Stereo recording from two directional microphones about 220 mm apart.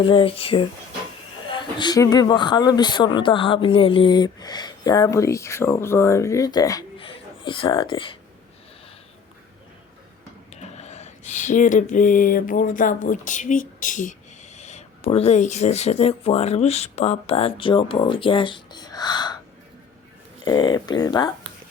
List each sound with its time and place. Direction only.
0.0 s speech: 25° left (ahead or behind)
10.5 s a sound: 30° left (ahead or behind)
20.4 s speech: 20° left (ahead or behind)